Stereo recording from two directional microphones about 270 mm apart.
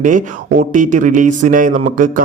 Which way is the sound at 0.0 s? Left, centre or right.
Right.